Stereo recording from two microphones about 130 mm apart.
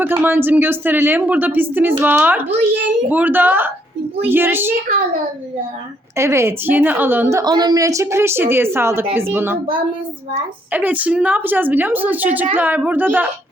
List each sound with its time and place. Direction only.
0.0 s speech: 15° right (ahead or behind)
6.1 s a woman's voice: 20° right (ahead or behind)
10.7 s speech: 15° right (ahead or behind)